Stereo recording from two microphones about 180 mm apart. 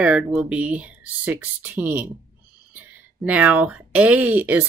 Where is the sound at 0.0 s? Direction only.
5° right (ahead or behind).